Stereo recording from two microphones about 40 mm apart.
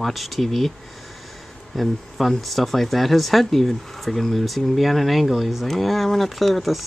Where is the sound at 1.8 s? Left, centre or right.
Centre.